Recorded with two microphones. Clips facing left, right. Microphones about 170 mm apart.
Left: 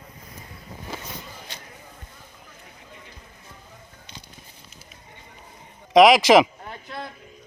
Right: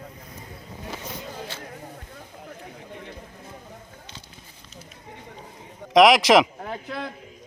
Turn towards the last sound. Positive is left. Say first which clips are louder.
# left 2 dB
turn(degrees=0)  # may be behind; listen again after turning